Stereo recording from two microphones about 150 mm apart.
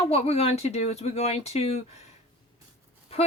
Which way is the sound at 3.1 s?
40° left (ahead or behind).